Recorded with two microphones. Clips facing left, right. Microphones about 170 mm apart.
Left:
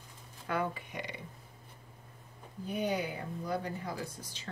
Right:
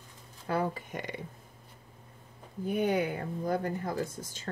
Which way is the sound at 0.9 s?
50° right (ahead or behind).